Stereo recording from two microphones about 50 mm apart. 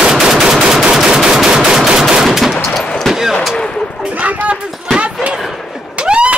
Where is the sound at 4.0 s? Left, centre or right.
Right.